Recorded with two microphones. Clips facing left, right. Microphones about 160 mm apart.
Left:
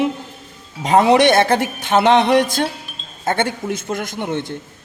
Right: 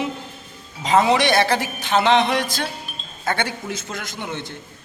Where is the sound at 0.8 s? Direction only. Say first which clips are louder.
Left 5 dB; 60° left (ahead or behind).